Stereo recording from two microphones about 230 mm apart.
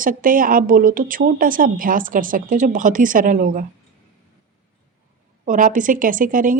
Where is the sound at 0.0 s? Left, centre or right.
Right.